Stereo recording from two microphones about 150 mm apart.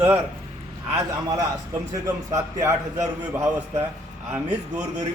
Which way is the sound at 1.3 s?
25° right (ahead or behind).